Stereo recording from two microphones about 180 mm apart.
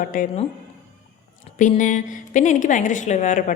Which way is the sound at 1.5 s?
45° left (ahead or behind).